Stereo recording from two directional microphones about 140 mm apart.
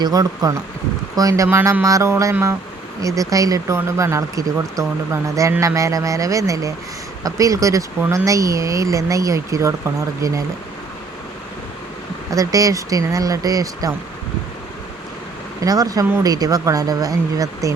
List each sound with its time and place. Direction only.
0.0 s speech: 25° right (ahead or behind)
12.3 s speech: 25° right (ahead or behind)
15.6 s speech: 25° right (ahead or behind)